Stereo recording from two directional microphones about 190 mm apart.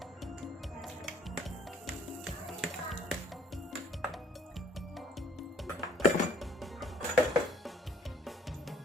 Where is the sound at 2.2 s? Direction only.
Centre (ahead or behind).